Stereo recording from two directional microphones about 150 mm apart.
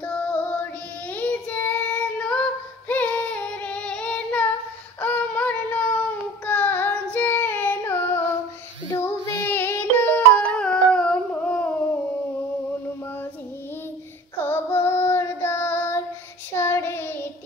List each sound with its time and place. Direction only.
0.0 s music: 10° left (ahead or behind)
1.1 s child singing: 10° left (ahead or behind)
9.0 s music: 15° left (ahead or behind)
14.4 s child singing: 15° left (ahead or behind)